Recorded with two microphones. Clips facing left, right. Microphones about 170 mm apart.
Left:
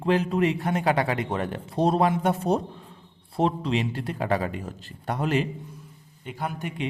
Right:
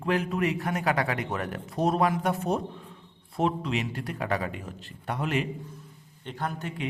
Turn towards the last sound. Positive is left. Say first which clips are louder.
# left 1 dB
turn(degrees=10)  # may be behind; listen again after turning